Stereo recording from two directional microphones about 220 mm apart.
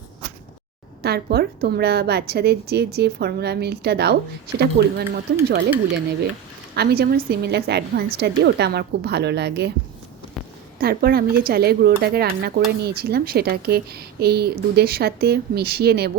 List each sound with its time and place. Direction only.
1.0 s a woman's voice: 45° right (ahead or behind)
6.7 s a woman's voice: 45° right (ahead or behind)
10.8 s a woman's voice: 45° right (ahead or behind)